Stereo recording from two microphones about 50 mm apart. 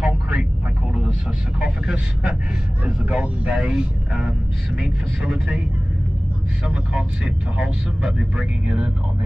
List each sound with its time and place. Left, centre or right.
0.0 s vehicle: centre
1.6 s vehicle: centre
2.8 s speech: right
6.7 s speech: right